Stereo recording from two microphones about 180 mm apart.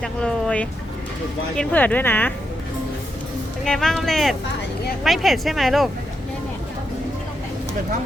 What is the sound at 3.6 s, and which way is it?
Speech, 5° left (ahead or behind).